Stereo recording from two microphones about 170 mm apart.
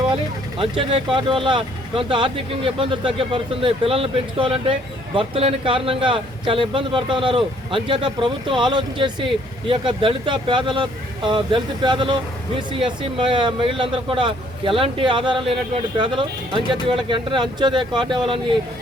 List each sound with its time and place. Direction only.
0.6 s speech: 30° right (ahead or behind)